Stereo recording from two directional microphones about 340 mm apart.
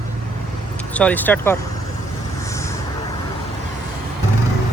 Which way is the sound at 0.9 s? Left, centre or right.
Centre.